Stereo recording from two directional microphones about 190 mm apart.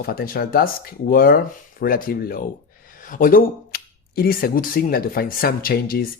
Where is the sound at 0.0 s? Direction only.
55° left (ahead or behind).